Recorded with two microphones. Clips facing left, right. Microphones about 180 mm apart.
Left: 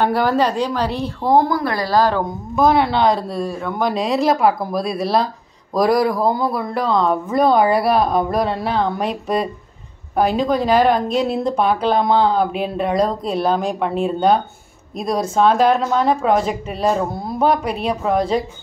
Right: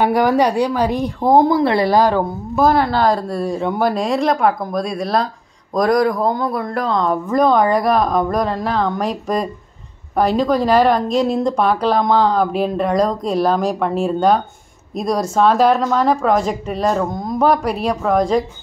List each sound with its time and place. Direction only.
0.0 s a woman's voice: 15° right (ahead or behind)
3.4 s a woman's voice: 15° right (ahead or behind)
3.8 s speech: centre (ahead or behind)